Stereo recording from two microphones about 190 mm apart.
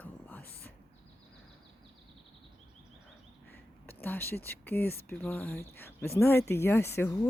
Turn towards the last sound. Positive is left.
turn(degrees=10)  # may be behind; listen again after turning